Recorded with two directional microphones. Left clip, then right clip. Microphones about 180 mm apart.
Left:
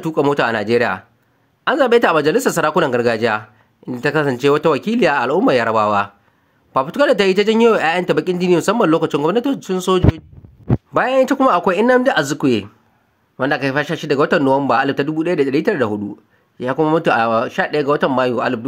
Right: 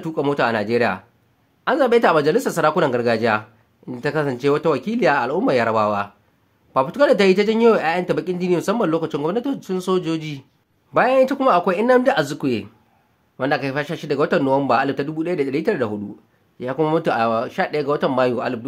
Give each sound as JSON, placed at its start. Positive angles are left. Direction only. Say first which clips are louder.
{"t": 0.0, "sound": "speech", "louder": "left 4 dB", "side_deg": 30}